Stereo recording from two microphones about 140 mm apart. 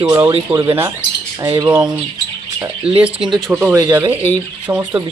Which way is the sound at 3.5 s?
10° right (ahead or behind).